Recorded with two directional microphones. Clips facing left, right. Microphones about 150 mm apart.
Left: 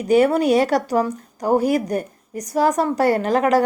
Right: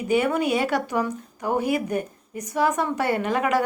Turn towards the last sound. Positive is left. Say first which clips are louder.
# left 5 dB
turn(degrees=40)  # may be behind; listen again after turning